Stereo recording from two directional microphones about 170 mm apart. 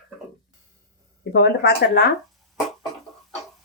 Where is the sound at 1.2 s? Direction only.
75° left (ahead or behind).